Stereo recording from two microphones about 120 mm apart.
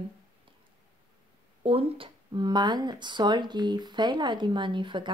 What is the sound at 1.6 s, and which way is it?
Speech, 55° right (ahead or behind).